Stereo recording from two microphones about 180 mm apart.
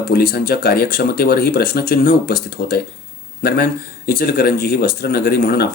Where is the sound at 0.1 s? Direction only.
55° left (ahead or behind).